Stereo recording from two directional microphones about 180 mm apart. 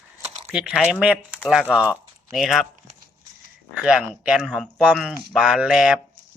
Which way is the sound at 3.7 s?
5° right (ahead or behind).